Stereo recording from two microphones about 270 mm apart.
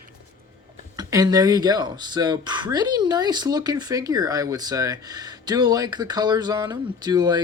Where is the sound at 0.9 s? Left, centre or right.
Centre.